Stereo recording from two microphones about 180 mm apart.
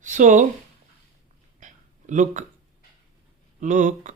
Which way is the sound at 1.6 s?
45° right (ahead or behind).